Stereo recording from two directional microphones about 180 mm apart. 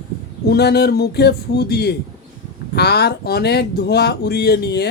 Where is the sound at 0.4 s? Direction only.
65° left (ahead or behind).